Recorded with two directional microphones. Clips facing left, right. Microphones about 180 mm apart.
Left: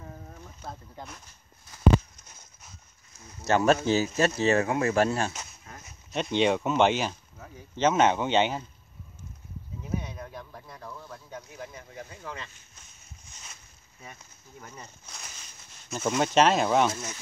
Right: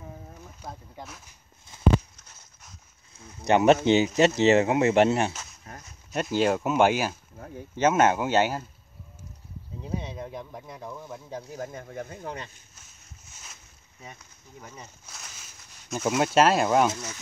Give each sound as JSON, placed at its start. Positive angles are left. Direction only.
{"t": 0.0, "sound": "boat", "side_deg": -10}
{"t": 3.4, "sound": "speech", "side_deg": -20}
{"t": 6.1, "sound": "speech", "side_deg": -5}
{"t": 9.8, "sound": "speech", "side_deg": -30}
{"t": 11.2, "sound": "speech", "side_deg": -30}
{"t": 11.6, "sound": "speech", "side_deg": -50}
{"t": 12.8, "sound": "a sound", "side_deg": -5}
{"t": 14.6, "sound": "speech", "side_deg": -5}